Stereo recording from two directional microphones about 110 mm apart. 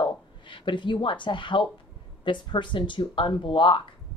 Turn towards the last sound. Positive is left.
turn(degrees=50)  # may be behind; listen again after turning